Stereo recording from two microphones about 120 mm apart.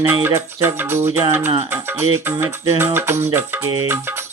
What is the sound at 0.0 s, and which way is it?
Music, 20° right (ahead or behind).